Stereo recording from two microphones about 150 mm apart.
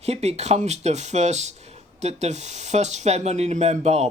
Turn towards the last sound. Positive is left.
turn(degrees=-45)  # may be behind; listen again after turning